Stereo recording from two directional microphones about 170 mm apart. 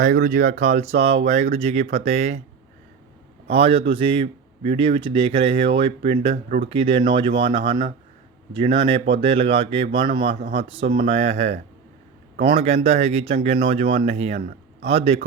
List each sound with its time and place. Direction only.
0.0 s a man's voice: 50° right (ahead or behind)
3.5 s a man's voice: 35° right (ahead or behind)
6.3 s speech: 50° right (ahead or behind)
6.7 s a man's voice: 35° right (ahead or behind)